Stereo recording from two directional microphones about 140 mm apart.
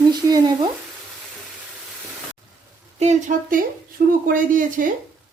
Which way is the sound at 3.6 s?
85° right.